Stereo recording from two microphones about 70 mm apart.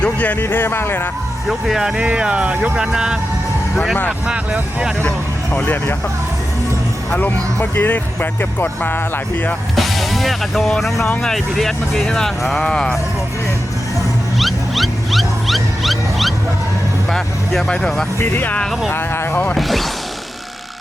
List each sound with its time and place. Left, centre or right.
0.0 s a sound: left
0.3 s speech: left
1.5 s speech: centre
4.3 s speech: centre
5.5 s speech: left
7.2 s speech: left
9.7 s speech: centre
14.3 s wild animals: centre
17.1 s speech: centre
18.2 s speech: left
19.5 s speech: centre